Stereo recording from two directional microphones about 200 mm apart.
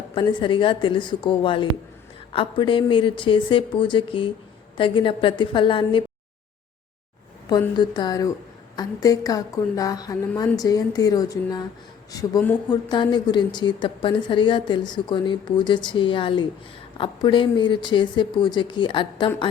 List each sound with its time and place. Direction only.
0.1 s speech: 25° left (ahead or behind)
7.5 s a woman's voice: 20° left (ahead or behind)